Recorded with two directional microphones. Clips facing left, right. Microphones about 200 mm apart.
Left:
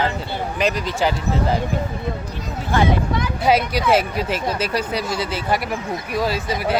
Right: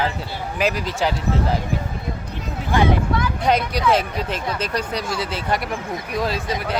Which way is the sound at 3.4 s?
5° left (ahead or behind).